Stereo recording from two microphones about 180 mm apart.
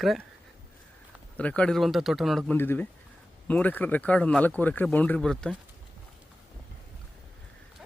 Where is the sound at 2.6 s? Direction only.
10° left (ahead or behind).